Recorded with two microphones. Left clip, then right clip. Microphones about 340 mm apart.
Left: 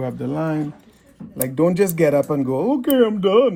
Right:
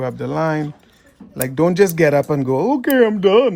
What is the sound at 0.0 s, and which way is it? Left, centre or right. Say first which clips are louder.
Speech: right 4 dB; centre.